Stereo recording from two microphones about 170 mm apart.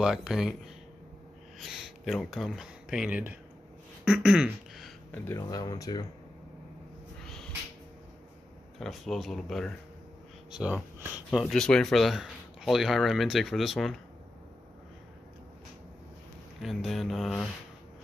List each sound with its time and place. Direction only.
0.0 s speech: 5° right (ahead or behind)
1.6 s speech: centre (ahead or behind)
4.0 s a sound: 5° right (ahead or behind)
5.1 s speech: 20° left (ahead or behind)
8.7 s speech: centre (ahead or behind)
16.6 s speech: centre (ahead or behind)